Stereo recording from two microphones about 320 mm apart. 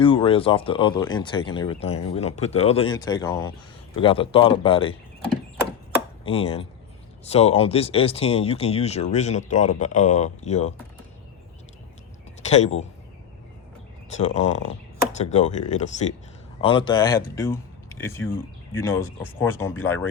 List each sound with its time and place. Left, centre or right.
0.0 s speech: centre
6.2 s speech: centre
12.5 s speech: left
14.2 s speech: left